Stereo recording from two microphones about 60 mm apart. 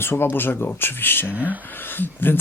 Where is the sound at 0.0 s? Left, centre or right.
Left.